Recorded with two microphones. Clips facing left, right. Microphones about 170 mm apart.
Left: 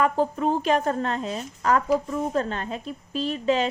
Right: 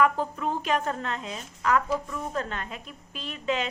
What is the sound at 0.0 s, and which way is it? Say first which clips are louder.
A woman's voice: left 3 dB; 35° left (ahead or behind).